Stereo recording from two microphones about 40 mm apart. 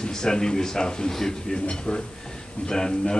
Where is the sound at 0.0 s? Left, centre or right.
Centre.